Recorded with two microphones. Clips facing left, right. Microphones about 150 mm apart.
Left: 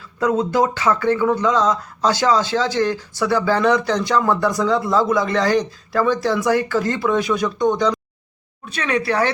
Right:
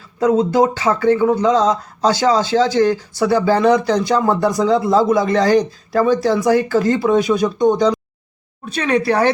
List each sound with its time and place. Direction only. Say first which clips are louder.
0.2 s speech: right 4 dB; 35° right (ahead or behind)